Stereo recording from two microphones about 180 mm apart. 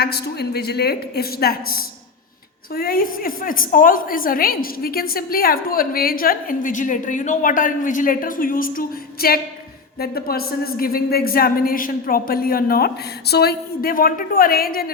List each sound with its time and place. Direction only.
0.0 s a woman's voice: 60° left (ahead or behind)